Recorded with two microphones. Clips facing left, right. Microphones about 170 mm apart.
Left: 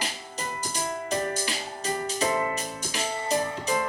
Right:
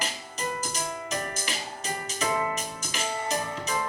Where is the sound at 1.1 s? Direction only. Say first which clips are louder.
Left 4 dB; 35° left (ahead or behind).